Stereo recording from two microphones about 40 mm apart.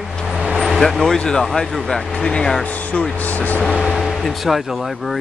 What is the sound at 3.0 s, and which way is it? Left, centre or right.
Speech, left.